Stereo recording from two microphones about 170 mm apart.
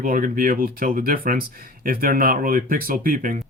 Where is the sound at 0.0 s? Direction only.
55° right (ahead or behind).